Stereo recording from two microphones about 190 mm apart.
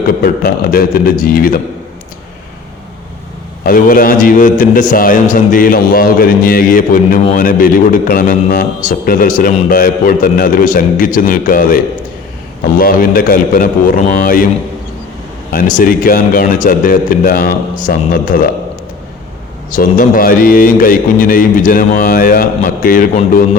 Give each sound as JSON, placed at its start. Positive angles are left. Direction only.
{"t": 0.2, "sound": "a man's voice", "side_deg": 50}
{"t": 3.6, "sound": "a man's voice", "side_deg": 50}
{"t": 15.5, "sound": "a man's voice", "side_deg": 45}
{"t": 19.7, "sound": "a man's voice", "side_deg": 45}